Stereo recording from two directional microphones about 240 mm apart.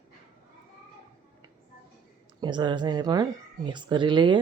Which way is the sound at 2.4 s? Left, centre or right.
Centre.